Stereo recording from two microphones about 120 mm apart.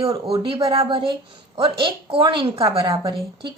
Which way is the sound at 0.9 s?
45° right (ahead or behind).